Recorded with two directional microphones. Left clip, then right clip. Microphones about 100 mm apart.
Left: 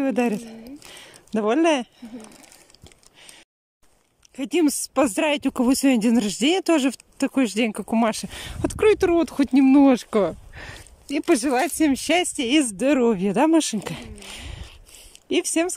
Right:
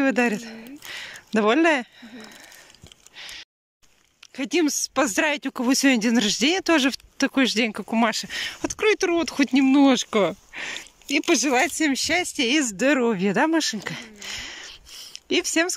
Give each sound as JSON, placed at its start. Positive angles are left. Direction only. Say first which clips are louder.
{"t": 0.0, "sound": "a sound", "louder": "right 2 dB", "side_deg": 30}
{"t": 1.4, "sound": "speech", "louder": "right 1 dB", "side_deg": 20}
{"t": 4.4, "sound": "speech", "louder": "left 1 dB", "side_deg": 25}